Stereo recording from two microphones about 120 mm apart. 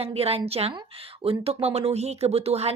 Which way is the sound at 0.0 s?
55° right (ahead or behind).